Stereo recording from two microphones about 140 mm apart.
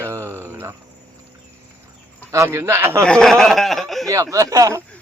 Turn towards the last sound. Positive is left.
turn(degrees=-25)  # may be behind; listen again after turning